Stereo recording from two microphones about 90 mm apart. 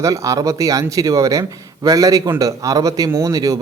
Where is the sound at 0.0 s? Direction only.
40° right (ahead or behind).